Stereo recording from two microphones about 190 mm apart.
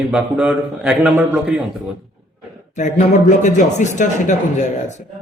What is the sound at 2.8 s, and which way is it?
Speech, 40° left (ahead or behind).